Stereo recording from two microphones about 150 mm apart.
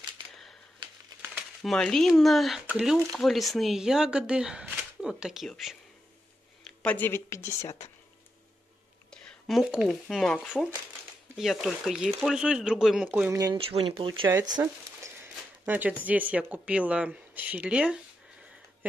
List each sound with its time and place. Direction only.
1.6 s speech: 5° left (ahead or behind)
6.8 s speech: 10° left (ahead or behind)
9.1 s speech: centre (ahead or behind)
13.3 s speech: 20° right (ahead or behind)
13.6 s speech: 40° right (ahead or behind)
14.5 s a sound: 20° right (ahead or behind)
15.6 s speech: 10° right (ahead or behind)